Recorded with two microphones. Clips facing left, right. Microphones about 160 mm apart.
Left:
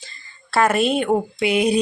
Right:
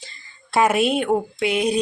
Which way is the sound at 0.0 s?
25° right (ahead or behind).